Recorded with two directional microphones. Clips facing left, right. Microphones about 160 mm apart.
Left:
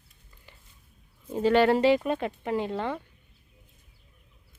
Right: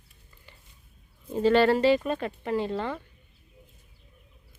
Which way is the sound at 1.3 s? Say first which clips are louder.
Even; 10° left (ahead or behind).